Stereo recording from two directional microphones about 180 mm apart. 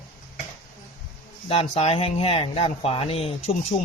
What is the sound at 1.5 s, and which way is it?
Speech, 35° left (ahead or behind).